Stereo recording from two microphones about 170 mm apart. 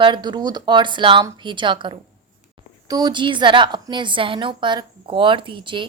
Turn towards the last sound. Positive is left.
turn(degrees=-30)  # may be behind; listen again after turning